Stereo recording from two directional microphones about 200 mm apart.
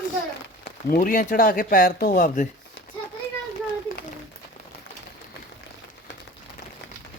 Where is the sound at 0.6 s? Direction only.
45° left (ahead or behind).